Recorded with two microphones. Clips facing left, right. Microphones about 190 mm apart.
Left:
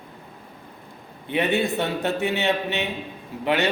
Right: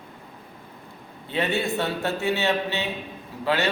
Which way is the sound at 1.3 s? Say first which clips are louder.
Left 3 dB; 15° left (ahead or behind).